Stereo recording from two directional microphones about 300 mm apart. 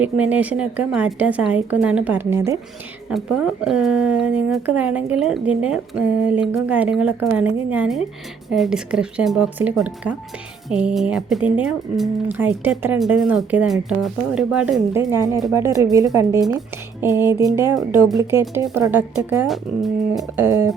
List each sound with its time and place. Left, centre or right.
0.0 s speech: centre